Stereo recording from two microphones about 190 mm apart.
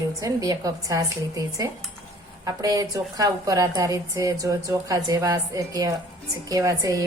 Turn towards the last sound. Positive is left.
turn(degrees=-20)  # may be behind; listen again after turning